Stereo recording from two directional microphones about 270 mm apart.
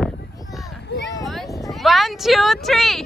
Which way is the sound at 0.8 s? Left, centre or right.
Left.